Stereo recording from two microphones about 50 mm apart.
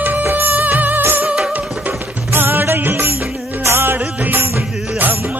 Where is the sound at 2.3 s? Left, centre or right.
Right.